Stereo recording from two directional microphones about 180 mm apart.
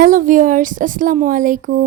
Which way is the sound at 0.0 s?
50° right (ahead or behind).